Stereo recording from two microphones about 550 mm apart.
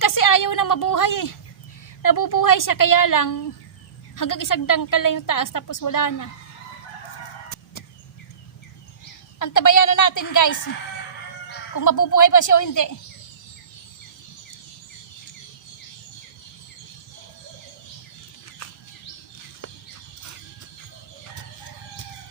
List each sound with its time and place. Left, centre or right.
0.0 s a sound: left
2.0 s a woman's voice: left
9.4 s a woman's voice: left
11.7 s a woman's voice: left
18.6 s bird: left